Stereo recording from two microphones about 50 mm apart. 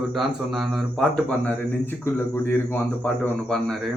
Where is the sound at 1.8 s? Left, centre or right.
Left.